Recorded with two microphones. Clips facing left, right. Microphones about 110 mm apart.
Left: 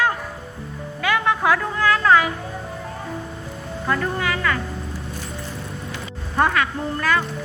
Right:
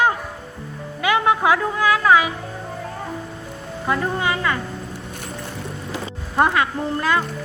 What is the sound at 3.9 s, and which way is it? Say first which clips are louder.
Speech: right 2 dB; 20° right (ahead or behind).